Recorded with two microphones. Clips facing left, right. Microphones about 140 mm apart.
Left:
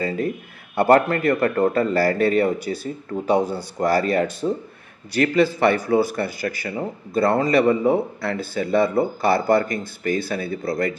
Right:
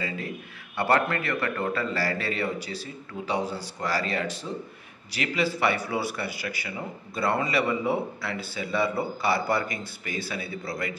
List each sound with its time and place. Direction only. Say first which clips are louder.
0.7 s speech: left 8 dB; 45° left (ahead or behind)